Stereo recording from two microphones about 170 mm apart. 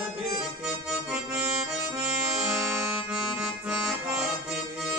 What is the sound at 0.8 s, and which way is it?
Accordion, centre (ahead or behind).